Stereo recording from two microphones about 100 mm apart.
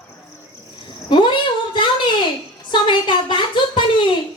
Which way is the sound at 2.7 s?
50° left (ahead or behind).